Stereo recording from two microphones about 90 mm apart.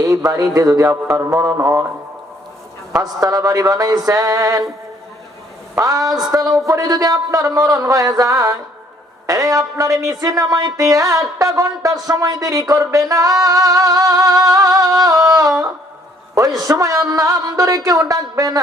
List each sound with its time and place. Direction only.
0.3 s speech: 40° right (ahead or behind)
2.9 s speech: 40° right (ahead or behind)
5.8 s speech: 40° right (ahead or behind)